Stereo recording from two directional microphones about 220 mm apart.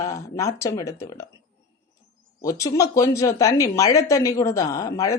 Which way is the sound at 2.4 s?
15° left (ahead or behind).